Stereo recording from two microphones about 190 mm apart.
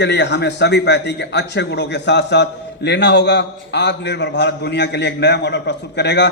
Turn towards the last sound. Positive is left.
turn(degrees=65)  # may be behind; listen again after turning